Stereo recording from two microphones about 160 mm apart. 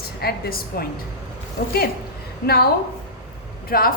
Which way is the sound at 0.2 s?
75° left (ahead or behind).